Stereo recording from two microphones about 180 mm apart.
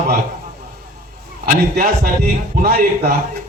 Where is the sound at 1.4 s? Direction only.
50° right (ahead or behind).